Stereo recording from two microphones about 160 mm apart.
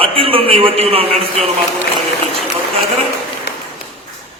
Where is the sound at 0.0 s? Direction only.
35° right (ahead or behind).